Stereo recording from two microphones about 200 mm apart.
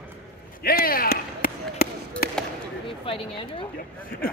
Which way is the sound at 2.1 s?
5° left (ahead or behind).